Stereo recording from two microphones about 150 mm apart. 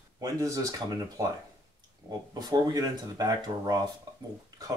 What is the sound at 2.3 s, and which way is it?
Speech, 25° right (ahead or behind).